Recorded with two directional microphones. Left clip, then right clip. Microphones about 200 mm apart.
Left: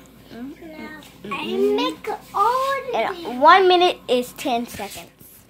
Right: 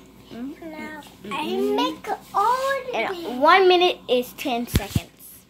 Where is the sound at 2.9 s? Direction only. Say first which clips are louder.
Left 2 dB; 5° left (ahead or behind).